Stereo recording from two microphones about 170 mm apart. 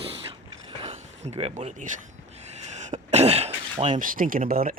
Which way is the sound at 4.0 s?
55° right (ahead or behind).